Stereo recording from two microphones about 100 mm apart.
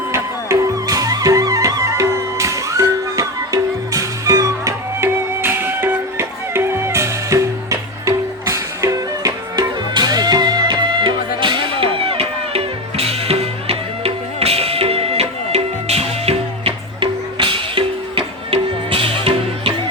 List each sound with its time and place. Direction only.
0.1 s music: 30° right (ahead or behind)
9.9 s music: 45° right (ahead or behind); by 19.7 s 65° right (ahead or behind)